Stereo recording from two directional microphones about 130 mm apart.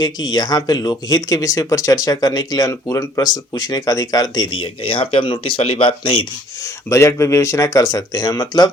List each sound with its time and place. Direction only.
0.0 s speech: 30° left (ahead or behind)
6.6 s speech: 20° left (ahead or behind)